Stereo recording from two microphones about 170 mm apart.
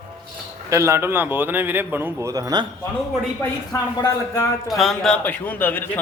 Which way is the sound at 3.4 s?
20° left (ahead or behind).